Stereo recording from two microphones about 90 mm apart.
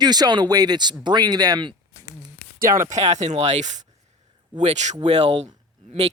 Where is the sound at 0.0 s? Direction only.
50° right (ahead or behind).